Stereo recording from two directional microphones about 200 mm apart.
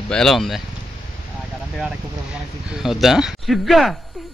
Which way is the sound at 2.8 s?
Centre (ahead or behind).